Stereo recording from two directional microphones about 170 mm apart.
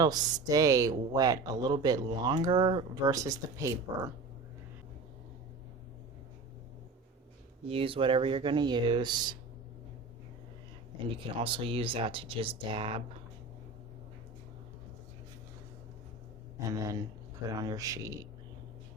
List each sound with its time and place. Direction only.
0.0 s speech: 25° right (ahead or behind)
7.7 s speech: 35° right (ahead or behind)
11.2 s speech: 30° right (ahead or behind)
16.6 s speech: 20° right (ahead or behind)